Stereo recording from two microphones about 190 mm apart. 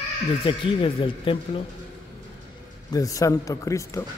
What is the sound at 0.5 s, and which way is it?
Speech, 30° left (ahead or behind).